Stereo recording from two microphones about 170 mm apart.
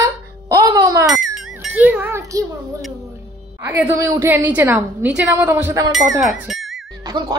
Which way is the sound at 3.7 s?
15° right (ahead or behind).